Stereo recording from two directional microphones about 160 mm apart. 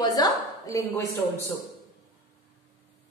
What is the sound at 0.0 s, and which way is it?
A woman's voice, 25° left (ahead or behind).